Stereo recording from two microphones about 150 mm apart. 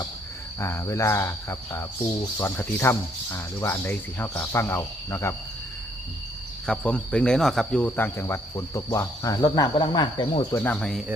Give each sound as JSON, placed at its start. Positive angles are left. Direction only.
{"t": 0.6, "sound": "speech", "side_deg": 20}
{"t": 6.7, "sound": "speech", "side_deg": 5}
{"t": 10.6, "sound": "speech", "side_deg": 5}